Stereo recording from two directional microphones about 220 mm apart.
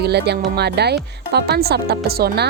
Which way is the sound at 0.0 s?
50° right (ahead or behind).